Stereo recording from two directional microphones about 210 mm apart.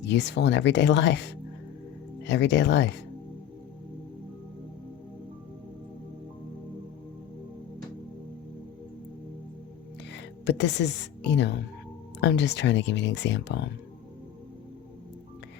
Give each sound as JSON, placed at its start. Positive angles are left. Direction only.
{"t": 0.0, "sound": "speech", "side_deg": 55}
{"t": 10.1, "sound": "a woman's voice", "side_deg": 55}